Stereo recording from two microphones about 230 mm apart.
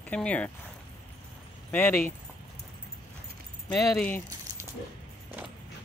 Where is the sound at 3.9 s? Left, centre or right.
Centre.